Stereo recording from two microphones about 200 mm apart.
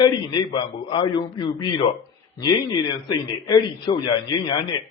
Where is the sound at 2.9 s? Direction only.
20° left (ahead or behind).